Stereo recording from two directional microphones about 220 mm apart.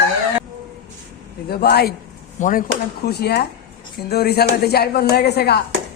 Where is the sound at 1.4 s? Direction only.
45° left (ahead or behind).